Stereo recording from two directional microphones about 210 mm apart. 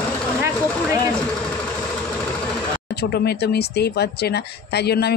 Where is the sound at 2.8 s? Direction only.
50° left (ahead or behind).